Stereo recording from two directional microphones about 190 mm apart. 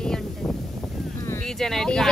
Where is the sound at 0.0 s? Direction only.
5° left (ahead or behind).